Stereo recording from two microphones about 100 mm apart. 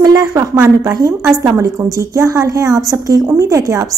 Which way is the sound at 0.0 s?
40° right (ahead or behind).